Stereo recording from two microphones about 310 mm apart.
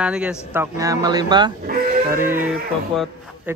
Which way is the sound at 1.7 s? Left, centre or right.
Right.